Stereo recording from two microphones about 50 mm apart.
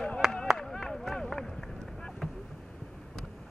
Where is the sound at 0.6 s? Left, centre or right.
Centre.